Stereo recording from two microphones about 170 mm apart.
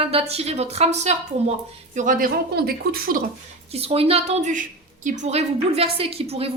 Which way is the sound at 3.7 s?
35° right (ahead or behind).